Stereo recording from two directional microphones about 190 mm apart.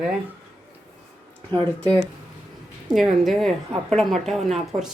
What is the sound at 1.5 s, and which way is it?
A woman's voice, 10° left (ahead or behind).